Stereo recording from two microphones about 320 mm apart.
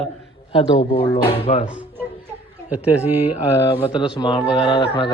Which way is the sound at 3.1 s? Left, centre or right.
Left.